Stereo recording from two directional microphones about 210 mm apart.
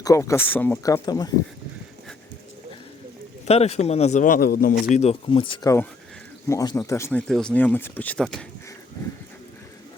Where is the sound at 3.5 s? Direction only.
30° left (ahead or behind); by 4.8 s 45° left (ahead or behind).